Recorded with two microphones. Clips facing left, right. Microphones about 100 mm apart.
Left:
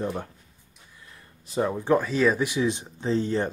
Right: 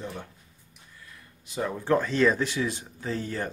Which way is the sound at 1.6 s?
15° left (ahead or behind).